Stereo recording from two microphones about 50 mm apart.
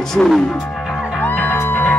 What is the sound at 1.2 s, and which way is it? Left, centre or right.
Music, left.